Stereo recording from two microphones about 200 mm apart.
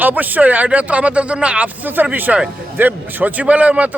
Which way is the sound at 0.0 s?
10° right (ahead or behind).